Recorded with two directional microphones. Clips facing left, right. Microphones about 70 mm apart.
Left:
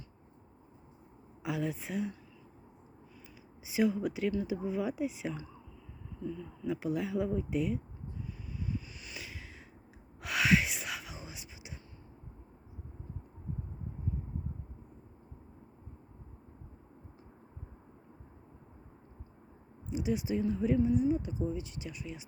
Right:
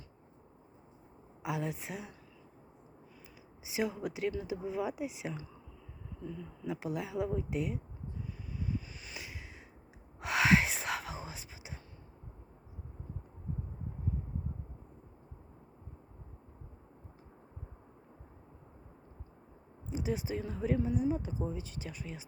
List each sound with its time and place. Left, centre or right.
1.4 s speech: centre
3.8 s speech: centre
6.7 s speech: centre
8.5 s vehicle: right
9.1 s a sound: centre
10.2 s whispering: right
19.9 s speech: right